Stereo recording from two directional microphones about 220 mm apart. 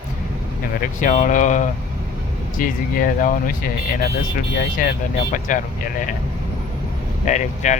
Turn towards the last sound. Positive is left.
turn(degrees=35)  # may be behind; listen again after turning